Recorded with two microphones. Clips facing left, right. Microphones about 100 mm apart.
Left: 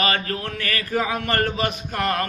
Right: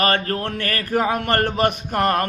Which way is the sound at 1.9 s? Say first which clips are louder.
Right 4 dB; 40° right (ahead or behind).